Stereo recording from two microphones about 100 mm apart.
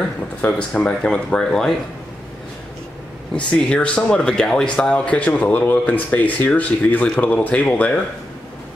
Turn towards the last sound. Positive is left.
turn(degrees=15)  # may be behind; listen again after turning